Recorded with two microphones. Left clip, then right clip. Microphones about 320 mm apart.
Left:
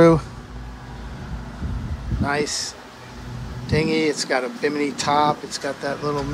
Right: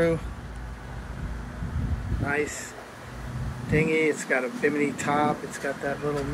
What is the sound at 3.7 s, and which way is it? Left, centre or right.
Speech, centre.